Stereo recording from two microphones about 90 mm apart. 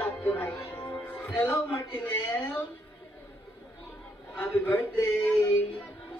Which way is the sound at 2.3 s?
15° left (ahead or behind).